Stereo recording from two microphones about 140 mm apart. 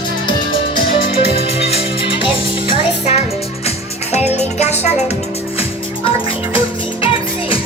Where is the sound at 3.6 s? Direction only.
50° left (ahead or behind).